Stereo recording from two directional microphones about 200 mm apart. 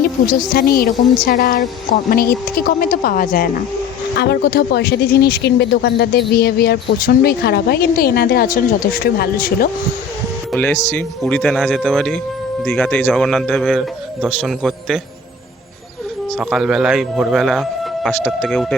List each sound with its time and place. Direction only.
0.0 s a woman's voice: 50° left (ahead or behind)
10.5 s a man's voice: 10° left (ahead or behind)
16.4 s a man's voice: centre (ahead or behind)